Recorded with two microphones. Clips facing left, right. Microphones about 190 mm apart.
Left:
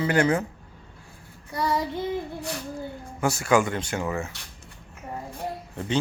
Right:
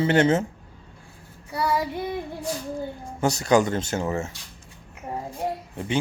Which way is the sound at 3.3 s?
35° right (ahead or behind).